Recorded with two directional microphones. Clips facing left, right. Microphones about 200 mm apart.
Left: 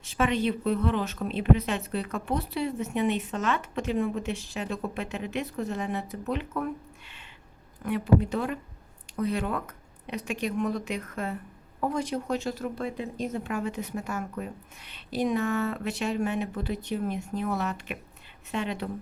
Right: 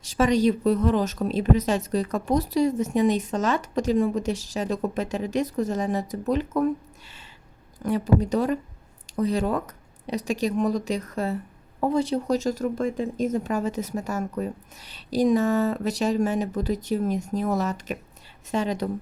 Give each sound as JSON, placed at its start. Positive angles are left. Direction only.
{"t": 0.2, "sound": "speech", "side_deg": -40}
{"t": 7.8, "sound": "speech", "side_deg": -35}